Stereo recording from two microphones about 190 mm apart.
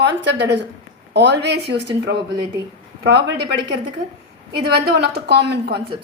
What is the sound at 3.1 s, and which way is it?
Speech, 65° right (ahead or behind).